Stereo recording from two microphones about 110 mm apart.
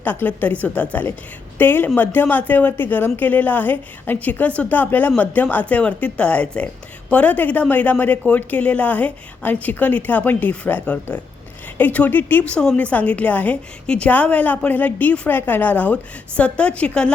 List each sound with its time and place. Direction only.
0.0 s a woman's voice: 15° left (ahead or behind)